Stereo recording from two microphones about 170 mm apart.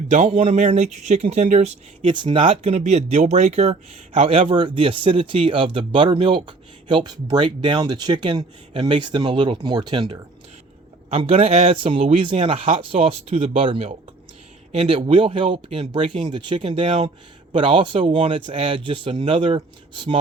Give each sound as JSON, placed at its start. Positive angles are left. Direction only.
{"t": 0.1, "sound": "speech", "side_deg": -40}
{"t": 2.1, "sound": "speech", "side_deg": -30}